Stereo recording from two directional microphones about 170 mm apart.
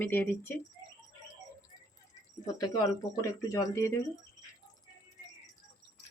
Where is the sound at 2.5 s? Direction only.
20° left (ahead or behind).